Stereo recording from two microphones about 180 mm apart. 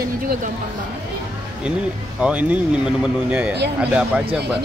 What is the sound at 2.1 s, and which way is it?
Speech, 5° right (ahead or behind).